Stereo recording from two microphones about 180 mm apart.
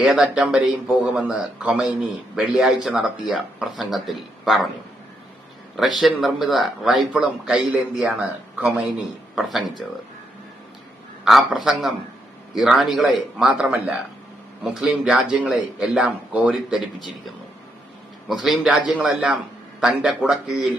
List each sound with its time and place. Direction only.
0.0 s speech: 5° right (ahead or behind)
6.0 s speech: centre (ahead or behind)
11.3 s speech: centre (ahead or behind)
18.3 s speech: centre (ahead or behind)